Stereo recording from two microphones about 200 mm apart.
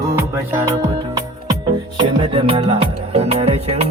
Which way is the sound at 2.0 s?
25° right (ahead or behind).